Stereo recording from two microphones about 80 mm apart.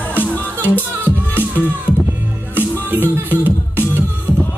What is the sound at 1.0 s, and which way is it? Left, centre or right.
Music, right.